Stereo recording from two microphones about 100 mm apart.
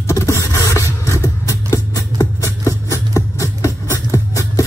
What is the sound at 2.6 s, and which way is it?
Music, 30° left (ahead or behind).